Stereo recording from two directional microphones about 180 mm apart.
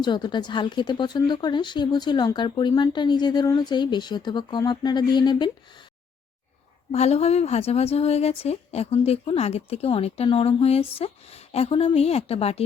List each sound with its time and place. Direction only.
0.0 s speech: 25° left (ahead or behind)
6.9 s speech: 35° left (ahead or behind)